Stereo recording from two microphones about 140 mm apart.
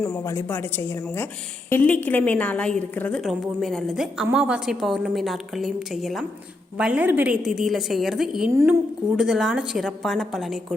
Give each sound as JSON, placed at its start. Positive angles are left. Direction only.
{"t": 0.0, "sound": "a woman's voice", "side_deg": 25}